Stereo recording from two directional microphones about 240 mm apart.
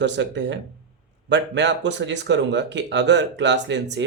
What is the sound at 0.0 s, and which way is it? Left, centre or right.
Speech, right.